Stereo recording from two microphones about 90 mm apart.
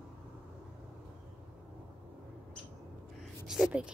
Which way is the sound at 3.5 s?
10° right (ahead or behind).